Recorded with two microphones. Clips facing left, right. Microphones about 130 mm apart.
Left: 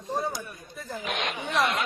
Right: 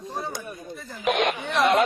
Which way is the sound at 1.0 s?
60° right (ahead or behind).